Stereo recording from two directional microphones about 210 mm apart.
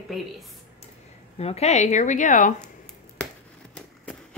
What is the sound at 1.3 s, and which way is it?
A woman's voice, 30° left (ahead or behind).